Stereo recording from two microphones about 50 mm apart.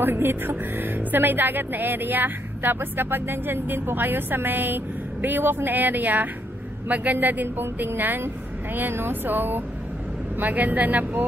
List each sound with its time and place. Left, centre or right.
0.0 s speech: right